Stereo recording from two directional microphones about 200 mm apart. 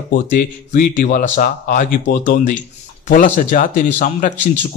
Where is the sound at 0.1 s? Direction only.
45° left (ahead or behind).